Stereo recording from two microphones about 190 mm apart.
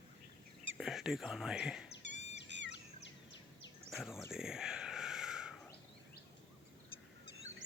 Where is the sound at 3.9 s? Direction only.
Centre (ahead or behind).